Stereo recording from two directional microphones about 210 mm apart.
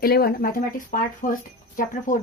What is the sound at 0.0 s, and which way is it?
Speech, 45° left (ahead or behind).